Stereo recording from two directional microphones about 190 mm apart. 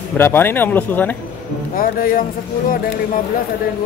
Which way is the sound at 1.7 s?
50° left (ahead or behind).